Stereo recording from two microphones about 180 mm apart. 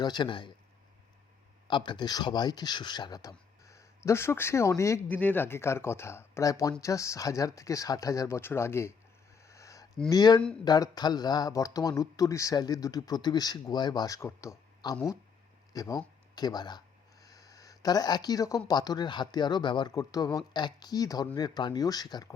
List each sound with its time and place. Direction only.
0.0 s speech: 25° left (ahead or behind)
1.6 s speech: 25° left (ahead or behind)
9.4 s a sound: 15° left (ahead or behind)
10.1 s speech: 20° left (ahead or behind)
16.3 s a sound: 20° left (ahead or behind)
18.7 s speech: 25° left (ahead or behind)